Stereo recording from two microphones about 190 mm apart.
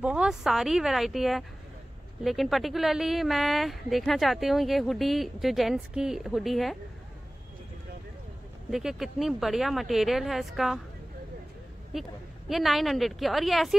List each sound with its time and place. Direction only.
0.0 s speech: 5° right (ahead or behind)
8.6 s speech: centre (ahead or behind)
11.9 s a woman's voice: centre (ahead or behind)